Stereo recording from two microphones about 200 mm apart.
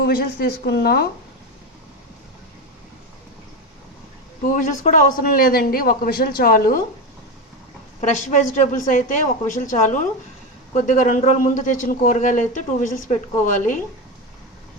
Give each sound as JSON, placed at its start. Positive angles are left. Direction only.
{"t": 0.0, "sound": "a man's voice", "side_deg": 50}
{"t": 4.4, "sound": "a man's voice", "side_deg": 40}
{"t": 8.0, "sound": "a man's voice", "side_deg": 35}